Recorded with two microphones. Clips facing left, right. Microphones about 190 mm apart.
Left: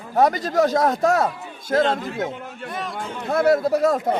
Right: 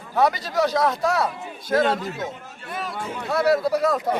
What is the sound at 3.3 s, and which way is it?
Speech, 50° left (ahead or behind).